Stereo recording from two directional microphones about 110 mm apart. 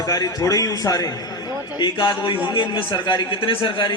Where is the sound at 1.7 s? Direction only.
45° left (ahead or behind).